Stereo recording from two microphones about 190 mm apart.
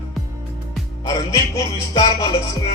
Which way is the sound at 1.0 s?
20° left (ahead or behind).